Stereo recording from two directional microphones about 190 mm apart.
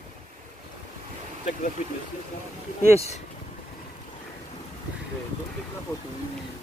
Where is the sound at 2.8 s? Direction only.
35° left (ahead or behind).